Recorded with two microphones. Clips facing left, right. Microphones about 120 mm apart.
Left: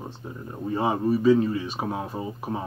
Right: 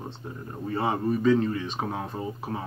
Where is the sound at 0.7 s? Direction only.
20° left (ahead or behind).